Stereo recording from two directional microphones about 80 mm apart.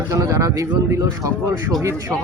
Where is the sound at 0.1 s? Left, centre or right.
Right.